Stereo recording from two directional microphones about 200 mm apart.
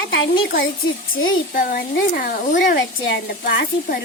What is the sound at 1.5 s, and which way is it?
Speech, 45° left (ahead or behind).